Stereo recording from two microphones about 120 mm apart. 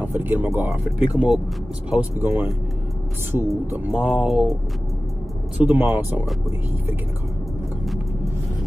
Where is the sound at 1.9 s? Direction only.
10° right (ahead or behind).